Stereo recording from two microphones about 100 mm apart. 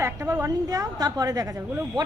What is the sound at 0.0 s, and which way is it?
A woman's voice, 30° right (ahead or behind).